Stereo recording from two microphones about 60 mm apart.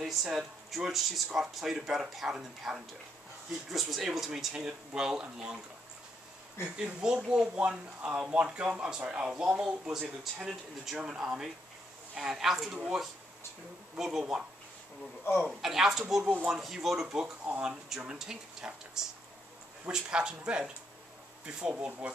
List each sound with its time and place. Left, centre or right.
0.0 s a sound: centre
0.4 s speech: centre
6.8 s speech: centre
15.6 s speech: centre; by 22.1 s right